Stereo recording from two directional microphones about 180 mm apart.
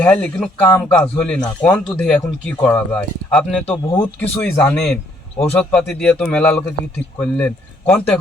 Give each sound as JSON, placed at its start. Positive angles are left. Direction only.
{"t": 0.0, "sound": "a man's voice", "side_deg": 5}
{"t": 3.7, "sound": "speech", "side_deg": 30}
{"t": 4.0, "sound": "a man's voice", "side_deg": 10}